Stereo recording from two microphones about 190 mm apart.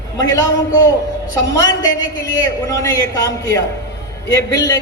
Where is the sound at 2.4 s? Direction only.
15° left (ahead or behind).